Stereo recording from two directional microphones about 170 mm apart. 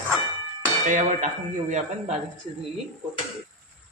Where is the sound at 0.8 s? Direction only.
50° right (ahead or behind).